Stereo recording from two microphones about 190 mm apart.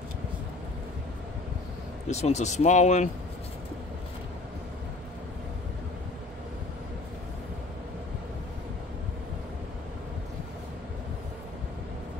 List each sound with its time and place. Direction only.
2.0 s speech: 35° left (ahead or behind)